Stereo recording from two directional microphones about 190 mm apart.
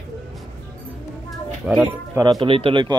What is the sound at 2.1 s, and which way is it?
Speech, 20° right (ahead or behind).